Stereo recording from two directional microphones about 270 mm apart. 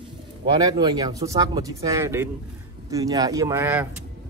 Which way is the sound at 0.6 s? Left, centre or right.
Centre.